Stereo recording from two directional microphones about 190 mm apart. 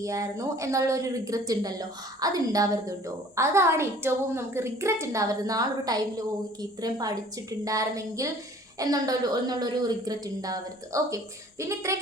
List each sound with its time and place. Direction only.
0.0 s a woman's voice: 15° right (ahead or behind)